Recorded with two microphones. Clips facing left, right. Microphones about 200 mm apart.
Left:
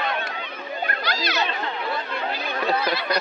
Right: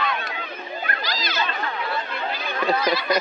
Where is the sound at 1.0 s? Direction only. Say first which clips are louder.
Left 3 dB; 65° left (ahead or behind).